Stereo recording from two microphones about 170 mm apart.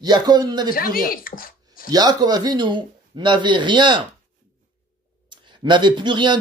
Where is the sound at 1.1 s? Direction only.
55° left (ahead or behind).